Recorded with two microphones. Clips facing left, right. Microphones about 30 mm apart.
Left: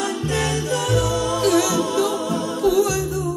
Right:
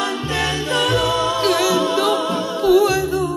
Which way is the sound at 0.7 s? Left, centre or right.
Right.